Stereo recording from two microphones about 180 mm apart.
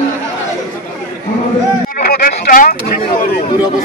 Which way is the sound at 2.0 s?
55° left (ahead or behind).